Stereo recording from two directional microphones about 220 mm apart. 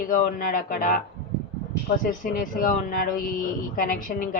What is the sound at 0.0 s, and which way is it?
Speech, 40° left (ahead or behind).